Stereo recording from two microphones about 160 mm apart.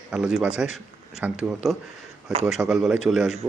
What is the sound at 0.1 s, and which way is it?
Speech, 5° right (ahead or behind).